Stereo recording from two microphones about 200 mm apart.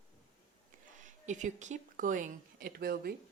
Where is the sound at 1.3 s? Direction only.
40° right (ahead or behind).